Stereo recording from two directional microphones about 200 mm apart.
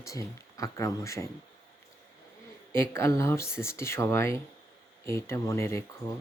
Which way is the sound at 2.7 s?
15° left (ahead or behind).